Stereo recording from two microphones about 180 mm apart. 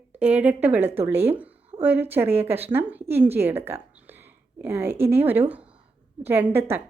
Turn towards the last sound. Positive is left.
turn(degrees=-10)  # may be behind; listen again after turning